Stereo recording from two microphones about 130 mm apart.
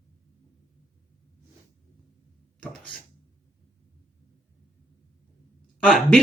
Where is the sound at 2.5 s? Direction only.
5° left (ahead or behind).